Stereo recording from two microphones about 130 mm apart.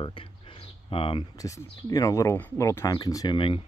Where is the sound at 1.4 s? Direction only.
25° left (ahead or behind).